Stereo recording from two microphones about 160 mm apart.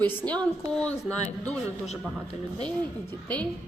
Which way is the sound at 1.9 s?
40° left (ahead or behind).